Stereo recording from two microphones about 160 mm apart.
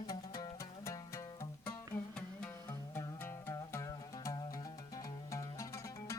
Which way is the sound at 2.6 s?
15° left (ahead or behind).